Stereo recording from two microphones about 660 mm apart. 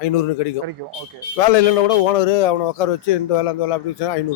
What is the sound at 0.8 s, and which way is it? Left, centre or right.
Speech, right.